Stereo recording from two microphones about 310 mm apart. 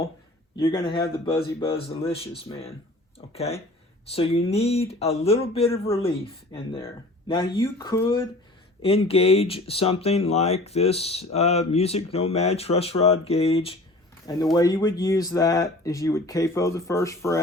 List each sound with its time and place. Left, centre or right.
0.5 s speech: centre